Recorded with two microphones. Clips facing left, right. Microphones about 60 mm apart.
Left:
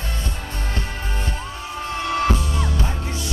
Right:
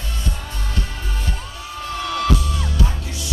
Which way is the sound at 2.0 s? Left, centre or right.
Left.